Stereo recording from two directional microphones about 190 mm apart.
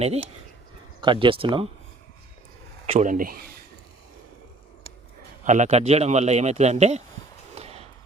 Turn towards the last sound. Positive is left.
turn(degrees=-35)  # may be behind; listen again after turning